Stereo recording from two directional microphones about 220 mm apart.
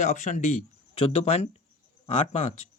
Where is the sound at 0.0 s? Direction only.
30° left (ahead or behind).